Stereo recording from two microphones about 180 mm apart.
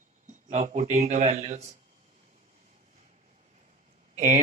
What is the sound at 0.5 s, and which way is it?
Speech, 40° right (ahead or behind).